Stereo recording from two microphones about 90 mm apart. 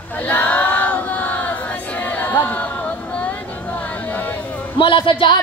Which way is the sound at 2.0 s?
20° left (ahead or behind).